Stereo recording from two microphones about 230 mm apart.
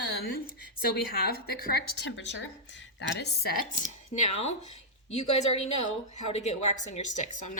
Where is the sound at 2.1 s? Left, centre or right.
Left.